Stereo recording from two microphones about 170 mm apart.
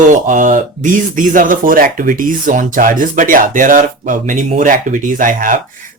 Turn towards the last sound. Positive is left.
turn(degrees=-50)  # may be behind; listen again after turning